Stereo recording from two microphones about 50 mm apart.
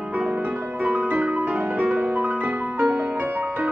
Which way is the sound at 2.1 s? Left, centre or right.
Right.